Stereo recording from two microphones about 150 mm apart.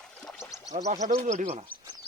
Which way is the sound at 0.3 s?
20° left (ahead or behind).